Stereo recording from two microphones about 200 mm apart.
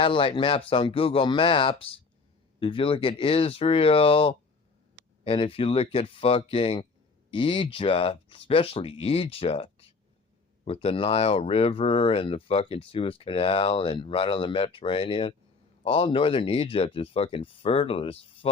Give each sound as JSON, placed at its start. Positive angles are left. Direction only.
{"t": 0.0, "sound": "speech", "side_deg": 25}